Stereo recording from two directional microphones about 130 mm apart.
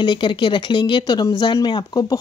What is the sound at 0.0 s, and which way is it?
Speech, 35° left (ahead or behind).